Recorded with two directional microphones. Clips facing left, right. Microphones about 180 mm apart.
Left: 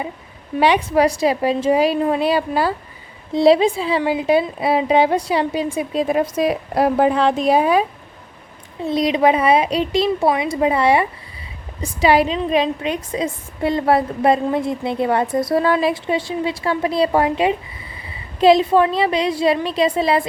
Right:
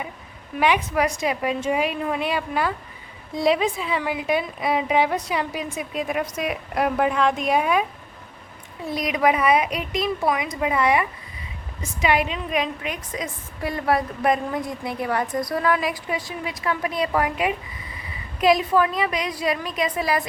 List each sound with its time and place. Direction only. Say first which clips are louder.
0.5 s a woman's voice: left 6 dB; 30° left (ahead or behind)